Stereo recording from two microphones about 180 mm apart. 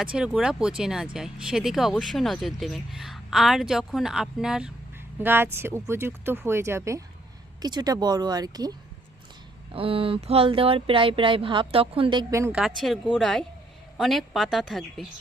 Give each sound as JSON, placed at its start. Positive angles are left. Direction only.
{"t": 0.0, "sound": "speech", "side_deg": -5}
{"t": 9.7, "sound": "speech", "side_deg": -30}
{"t": 12.3, "sound": "speech", "side_deg": -15}
{"t": 12.5, "sound": "speech", "side_deg": 0}